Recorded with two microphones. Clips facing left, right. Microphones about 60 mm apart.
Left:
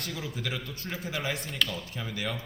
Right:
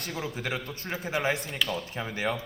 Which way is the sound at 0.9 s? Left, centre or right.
Right.